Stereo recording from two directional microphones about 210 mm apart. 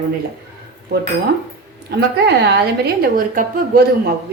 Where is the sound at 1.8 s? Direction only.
50° right (ahead or behind).